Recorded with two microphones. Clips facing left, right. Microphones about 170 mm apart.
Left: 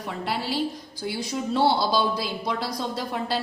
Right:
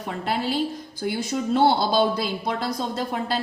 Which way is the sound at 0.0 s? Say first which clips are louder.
Right 3 dB; 50° right (ahead or behind).